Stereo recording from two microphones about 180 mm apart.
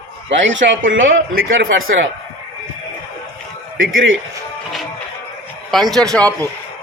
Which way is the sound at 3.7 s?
90° right.